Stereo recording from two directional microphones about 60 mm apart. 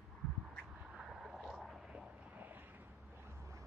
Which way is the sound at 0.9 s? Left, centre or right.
Centre.